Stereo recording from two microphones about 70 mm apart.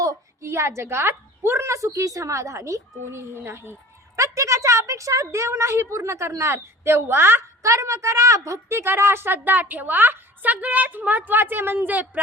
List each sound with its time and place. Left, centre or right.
0.4 s a woman's voice: right
4.2 s a woman's voice: right
7.6 s a woman's voice: right
8.8 s a woman's voice: right